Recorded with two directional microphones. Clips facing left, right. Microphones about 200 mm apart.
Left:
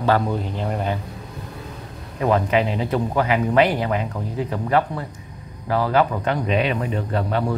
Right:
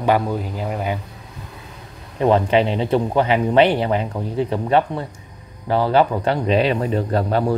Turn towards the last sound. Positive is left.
turn(degrees=-35)  # may be behind; listen again after turning